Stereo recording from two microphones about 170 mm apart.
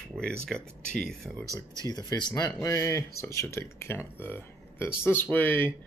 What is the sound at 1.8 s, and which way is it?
Speech, 25° left (ahead or behind).